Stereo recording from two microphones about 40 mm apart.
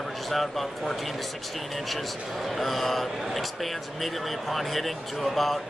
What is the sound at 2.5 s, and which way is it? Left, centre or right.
A man's voice, centre.